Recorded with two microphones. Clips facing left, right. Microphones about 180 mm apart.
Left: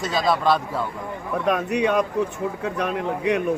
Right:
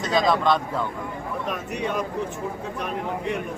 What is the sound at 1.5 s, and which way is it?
Speech, 65° left (ahead or behind).